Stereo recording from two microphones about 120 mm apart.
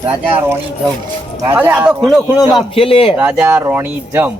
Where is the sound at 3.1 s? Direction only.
15° right (ahead or behind).